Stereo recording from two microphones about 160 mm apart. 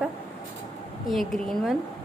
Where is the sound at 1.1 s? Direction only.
Centre (ahead or behind).